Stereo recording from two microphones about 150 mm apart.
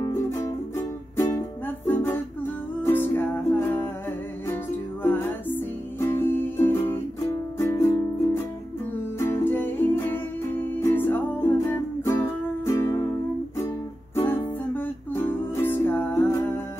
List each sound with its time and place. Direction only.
0.0 s music: 20° left (ahead or behind)
5.0 s music: 15° left (ahead or behind)
14.1 s music: 15° left (ahead or behind)